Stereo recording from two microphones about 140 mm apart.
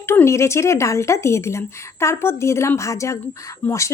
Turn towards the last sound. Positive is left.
turn(degrees=20)  # may be behind; listen again after turning